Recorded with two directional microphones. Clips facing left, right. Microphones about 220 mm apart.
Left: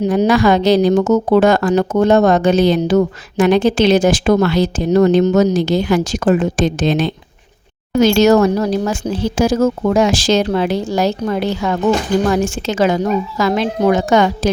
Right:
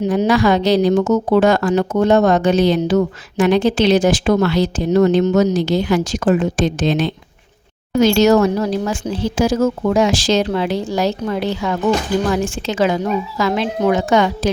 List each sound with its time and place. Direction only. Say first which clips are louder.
0.1 s speech: left 2 dB; 50° left (ahead or behind)